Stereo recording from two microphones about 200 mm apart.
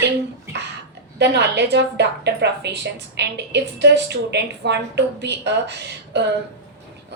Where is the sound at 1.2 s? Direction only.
55° right (ahead or behind).